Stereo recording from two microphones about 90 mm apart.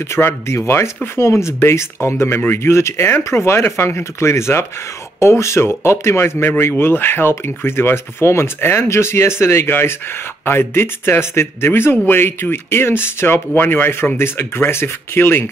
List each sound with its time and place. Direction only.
0.1 s speech: 30° left (ahead or behind)